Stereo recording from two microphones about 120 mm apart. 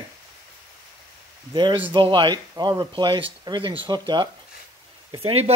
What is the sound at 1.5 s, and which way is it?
Speech, 40° right (ahead or behind).